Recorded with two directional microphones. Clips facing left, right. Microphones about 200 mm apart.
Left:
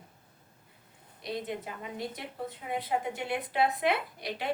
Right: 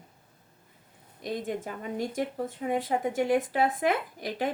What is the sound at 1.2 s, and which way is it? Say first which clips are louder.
Speech: right 3 dB; 45° right (ahead or behind).